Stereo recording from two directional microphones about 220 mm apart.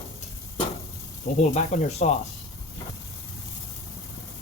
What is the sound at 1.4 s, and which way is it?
Speech, 30° left (ahead or behind).